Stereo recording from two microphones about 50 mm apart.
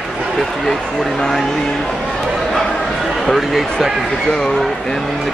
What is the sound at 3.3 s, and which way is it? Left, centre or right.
Speech, centre.